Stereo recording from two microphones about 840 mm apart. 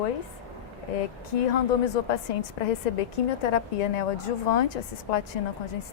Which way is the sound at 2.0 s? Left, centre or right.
Left.